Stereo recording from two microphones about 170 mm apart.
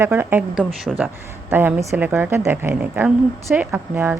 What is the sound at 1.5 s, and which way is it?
A woman's voice, 10° right (ahead or behind).